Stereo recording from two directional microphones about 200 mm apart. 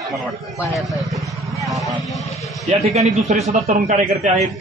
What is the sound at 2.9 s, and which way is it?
Speech, 35° right (ahead or behind).